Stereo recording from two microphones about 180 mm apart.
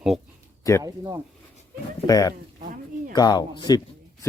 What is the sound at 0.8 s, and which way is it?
Speech, 20° right (ahead or behind).